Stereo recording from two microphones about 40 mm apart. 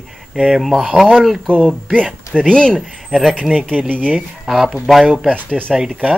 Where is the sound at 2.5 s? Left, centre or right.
Left.